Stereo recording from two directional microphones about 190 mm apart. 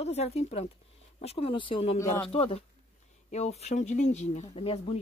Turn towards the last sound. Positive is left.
turn(degrees=30)  # may be behind; listen again after turning